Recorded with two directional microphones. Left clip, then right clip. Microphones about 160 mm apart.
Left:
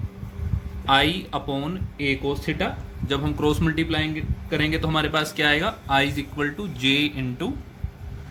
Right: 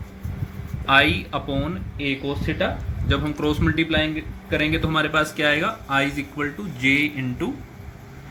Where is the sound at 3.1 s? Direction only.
50° left (ahead or behind).